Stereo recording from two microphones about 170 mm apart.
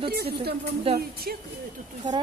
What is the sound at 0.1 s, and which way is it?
Speech, 65° right (ahead or behind).